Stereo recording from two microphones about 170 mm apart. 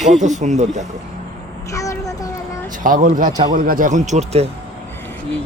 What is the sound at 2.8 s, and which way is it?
Speech, 55° right (ahead or behind).